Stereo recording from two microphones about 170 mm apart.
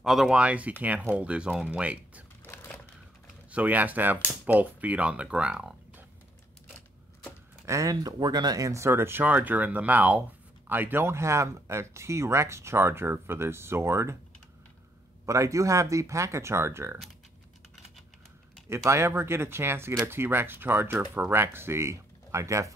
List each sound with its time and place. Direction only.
0.0 s speech: centre (ahead or behind)
2.4 s a sound: 10° left (ahead or behind)
3.5 s speech: 10° right (ahead or behind)
7.6 s speech: 20° right (ahead or behind)
15.2 s speech: 20° right (ahead or behind)
18.9 s speech: 15° right (ahead or behind)